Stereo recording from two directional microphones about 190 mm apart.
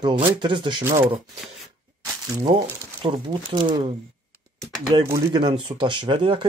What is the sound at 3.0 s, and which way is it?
Speech, 25° right (ahead or behind).